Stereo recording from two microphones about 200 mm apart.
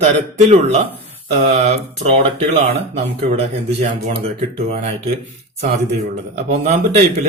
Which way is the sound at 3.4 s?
30° right (ahead or behind).